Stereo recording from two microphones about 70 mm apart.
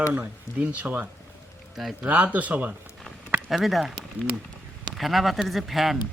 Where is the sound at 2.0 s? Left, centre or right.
Right.